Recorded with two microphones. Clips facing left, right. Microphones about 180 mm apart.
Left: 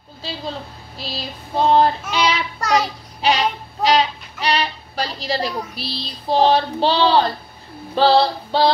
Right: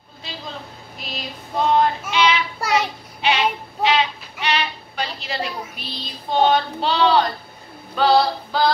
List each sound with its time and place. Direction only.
0.9 s child singing: 30° left (ahead or behind)
7.9 s female singing: 30° left (ahead or behind)